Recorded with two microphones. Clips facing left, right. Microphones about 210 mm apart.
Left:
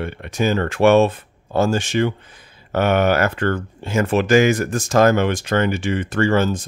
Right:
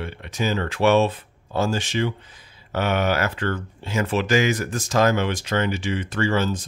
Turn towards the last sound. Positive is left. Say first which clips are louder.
# left 5 dB
turn(degrees=50)  # may be behind; listen again after turning